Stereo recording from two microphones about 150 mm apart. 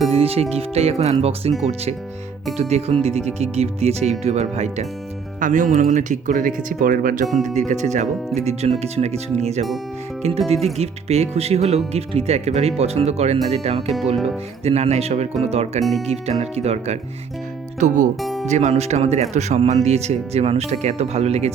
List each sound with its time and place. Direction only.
0.1 s speech: 40° right (ahead or behind); by 7.3 s 65° right (ahead or behind)
7.7 s speech: 50° right (ahead or behind)
15.8 s speech: centre (ahead or behind)
16.0 s speech: 45° right (ahead or behind)
18.2 s speech: centre (ahead or behind)
18.4 s speech: 50° right (ahead or behind)